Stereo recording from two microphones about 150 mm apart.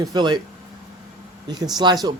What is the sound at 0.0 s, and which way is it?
Speech, 30° right (ahead or behind).